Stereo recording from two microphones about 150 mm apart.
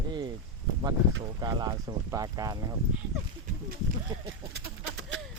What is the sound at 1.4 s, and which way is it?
Speech, 30° right (ahead or behind).